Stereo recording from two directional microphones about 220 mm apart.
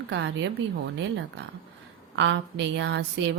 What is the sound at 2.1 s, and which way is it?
A woman's voice, 55° right (ahead or behind).